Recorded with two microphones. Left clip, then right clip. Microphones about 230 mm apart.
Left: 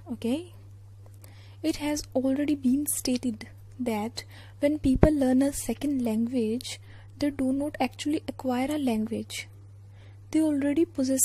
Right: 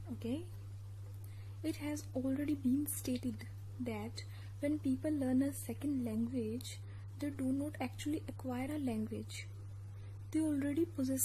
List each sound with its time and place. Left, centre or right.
1.6 s speech: left
10.3 s speech: left